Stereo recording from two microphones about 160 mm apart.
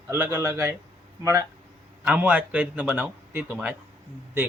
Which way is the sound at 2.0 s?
10° right (ahead or behind).